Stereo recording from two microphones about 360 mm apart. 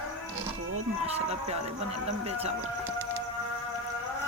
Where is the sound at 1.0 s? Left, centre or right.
Centre.